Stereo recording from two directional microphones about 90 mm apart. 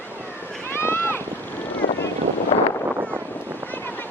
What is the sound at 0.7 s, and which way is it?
Boat, 25° left (ahead or behind).